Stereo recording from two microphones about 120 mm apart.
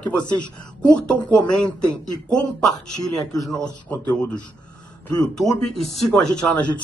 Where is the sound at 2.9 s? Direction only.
30° left (ahead or behind).